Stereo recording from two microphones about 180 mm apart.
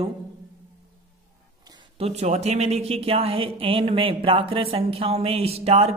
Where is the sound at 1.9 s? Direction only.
35° right (ahead or behind).